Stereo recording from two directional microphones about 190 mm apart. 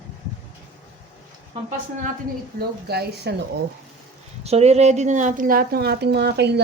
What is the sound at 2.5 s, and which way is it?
Speech, 55° right (ahead or behind).